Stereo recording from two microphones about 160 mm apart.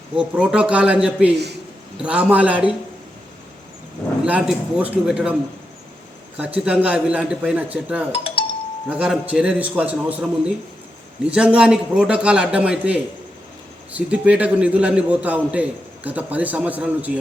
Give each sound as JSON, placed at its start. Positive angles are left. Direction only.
{"t": 0.2, "sound": "a man's voice", "side_deg": -5}
{"t": 4.2, "sound": "a man's voice", "side_deg": -5}
{"t": 6.7, "sound": "a man's voice", "side_deg": -10}
{"t": 8.1, "sound": "doorbell", "side_deg": 35}
{"t": 8.9, "sound": "a man's voice", "side_deg": -10}